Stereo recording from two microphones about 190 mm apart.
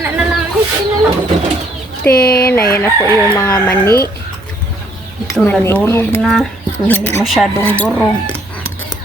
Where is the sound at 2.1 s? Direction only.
55° left (ahead or behind).